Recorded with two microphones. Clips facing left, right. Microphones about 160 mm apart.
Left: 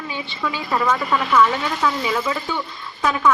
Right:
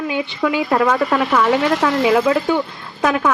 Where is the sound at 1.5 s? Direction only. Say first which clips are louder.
Right 6 dB; 80° right; by 3.3 s 60° right (ahead or behind).